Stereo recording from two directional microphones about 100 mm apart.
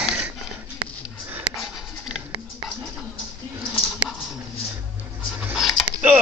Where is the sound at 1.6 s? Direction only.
5° right (ahead or behind).